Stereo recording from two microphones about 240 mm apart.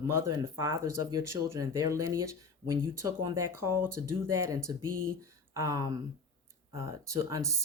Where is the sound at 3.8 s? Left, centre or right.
Right.